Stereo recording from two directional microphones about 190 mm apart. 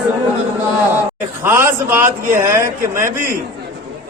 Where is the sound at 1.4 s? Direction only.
10° right (ahead or behind).